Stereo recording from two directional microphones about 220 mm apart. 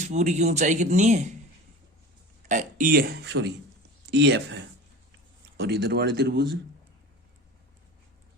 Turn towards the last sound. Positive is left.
turn(degrees=-45)  # may be behind; listen again after turning